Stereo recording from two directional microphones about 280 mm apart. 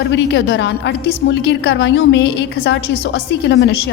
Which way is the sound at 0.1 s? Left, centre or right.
Left.